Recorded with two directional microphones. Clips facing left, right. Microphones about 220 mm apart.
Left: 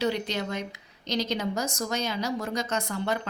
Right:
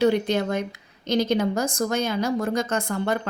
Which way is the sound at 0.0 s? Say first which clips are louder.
Right 8 dB; 50° right (ahead or behind).